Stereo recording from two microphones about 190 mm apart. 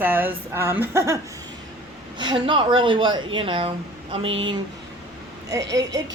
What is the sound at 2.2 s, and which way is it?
Speech, 25° right (ahead or behind).